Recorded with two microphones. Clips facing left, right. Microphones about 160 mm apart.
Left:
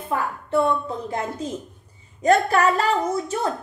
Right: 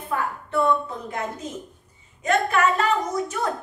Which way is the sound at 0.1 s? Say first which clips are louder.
Left 3 dB; 30° left (ahead or behind).